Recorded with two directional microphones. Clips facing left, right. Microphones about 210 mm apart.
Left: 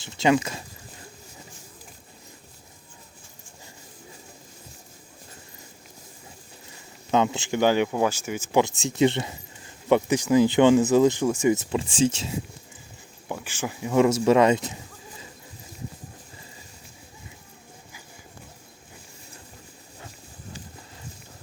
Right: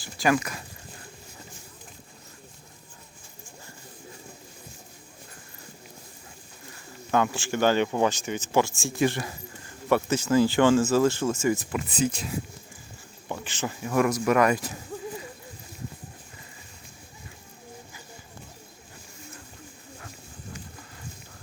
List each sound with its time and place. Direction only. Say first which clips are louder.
0.0 s speech: left 3 dB; 25° left (ahead or behind)
7.1 s speech: left 2 dB; 20° left (ahead or behind)
13.2 s speech: left 1 dB; 10° left (ahead or behind)